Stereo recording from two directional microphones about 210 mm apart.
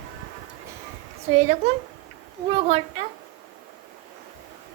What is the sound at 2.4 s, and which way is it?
Speech, 30° right (ahead or behind).